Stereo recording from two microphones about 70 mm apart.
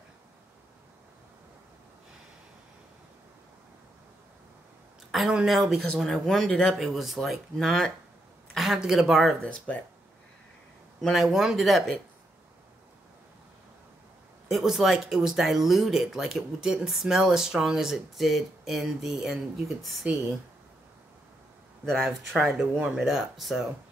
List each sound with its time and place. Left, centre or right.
5.1 s speech: centre
6.8 s speech: centre
8.5 s speech: centre
9.4 s speech: centre
11.0 s speech: centre
14.5 s speech: centre
22.0 s speech: centre